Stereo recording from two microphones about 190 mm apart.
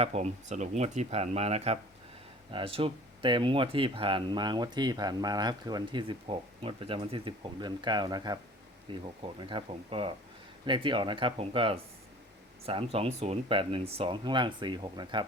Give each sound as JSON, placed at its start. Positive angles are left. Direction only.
{"t": 0.0, "sound": "speech", "side_deg": -35}